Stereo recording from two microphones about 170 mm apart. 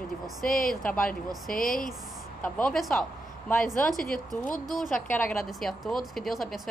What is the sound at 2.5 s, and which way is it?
Speech, 5° left (ahead or behind).